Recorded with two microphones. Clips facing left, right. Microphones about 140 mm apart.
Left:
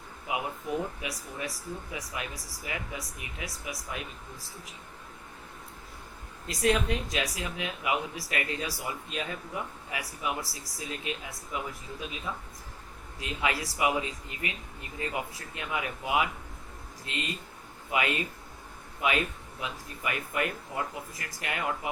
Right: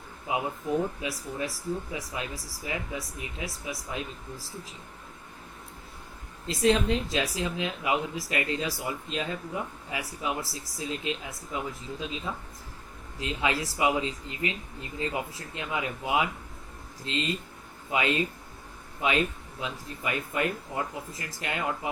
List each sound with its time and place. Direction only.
0.3 s speech: 25° right (ahead or behind)
6.5 s speech: 25° right (ahead or behind)